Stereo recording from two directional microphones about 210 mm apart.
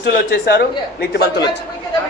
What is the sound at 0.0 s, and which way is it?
Speech, 55° left (ahead or behind).